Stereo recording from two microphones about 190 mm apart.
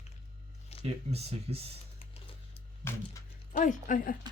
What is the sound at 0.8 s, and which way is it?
Speech, 35° right (ahead or behind).